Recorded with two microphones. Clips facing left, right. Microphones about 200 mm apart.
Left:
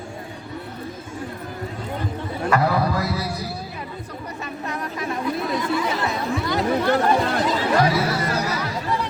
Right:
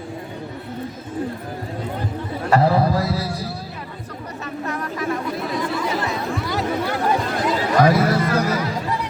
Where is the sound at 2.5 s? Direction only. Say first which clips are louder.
Right 4 dB; 30° right (ahead or behind).